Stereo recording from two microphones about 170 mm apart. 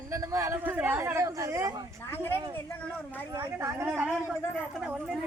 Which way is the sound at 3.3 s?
15° right (ahead or behind).